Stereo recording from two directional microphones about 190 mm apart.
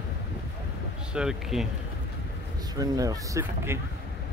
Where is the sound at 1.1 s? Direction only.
5° right (ahead or behind).